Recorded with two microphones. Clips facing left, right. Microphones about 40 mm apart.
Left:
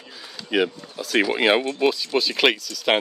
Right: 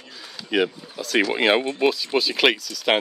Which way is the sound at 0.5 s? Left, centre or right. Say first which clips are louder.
Even; centre.